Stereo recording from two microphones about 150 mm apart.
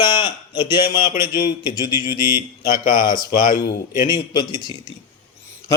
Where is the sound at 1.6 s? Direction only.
30° left (ahead or behind).